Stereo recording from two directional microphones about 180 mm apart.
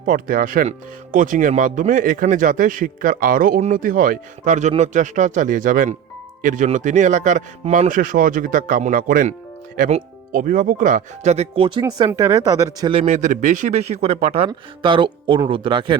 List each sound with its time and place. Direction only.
0.0 s speech: 50° right (ahead or behind); by 12.9 s 20° right (ahead or behind)
12.9 s speech: 35° right (ahead or behind)